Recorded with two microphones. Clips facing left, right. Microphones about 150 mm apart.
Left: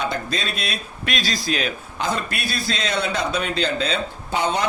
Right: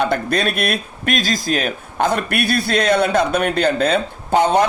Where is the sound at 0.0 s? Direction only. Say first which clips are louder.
Right 7 dB; 60° right (ahead or behind).